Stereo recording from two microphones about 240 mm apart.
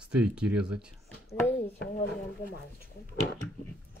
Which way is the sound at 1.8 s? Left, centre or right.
Left.